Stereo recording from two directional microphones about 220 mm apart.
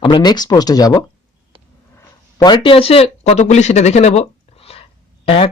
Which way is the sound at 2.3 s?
20° left (ahead or behind).